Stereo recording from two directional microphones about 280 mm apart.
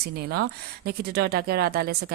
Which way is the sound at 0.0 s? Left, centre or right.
Right.